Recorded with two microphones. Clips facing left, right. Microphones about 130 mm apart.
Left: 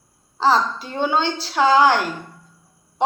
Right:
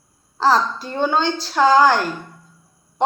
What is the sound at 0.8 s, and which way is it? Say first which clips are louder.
A woman's voice: right 1 dB; 5° left (ahead or behind).